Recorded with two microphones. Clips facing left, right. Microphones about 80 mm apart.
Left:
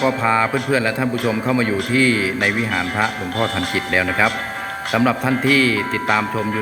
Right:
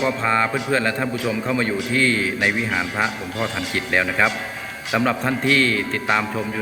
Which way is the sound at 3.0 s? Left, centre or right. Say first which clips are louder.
Left 3 dB; left.